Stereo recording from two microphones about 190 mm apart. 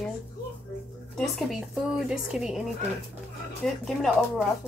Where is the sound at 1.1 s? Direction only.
Centre (ahead or behind).